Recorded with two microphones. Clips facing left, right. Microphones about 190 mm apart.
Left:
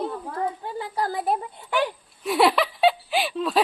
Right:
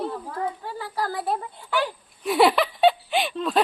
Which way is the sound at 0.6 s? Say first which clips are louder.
Left 2 dB; 20° left (ahead or behind).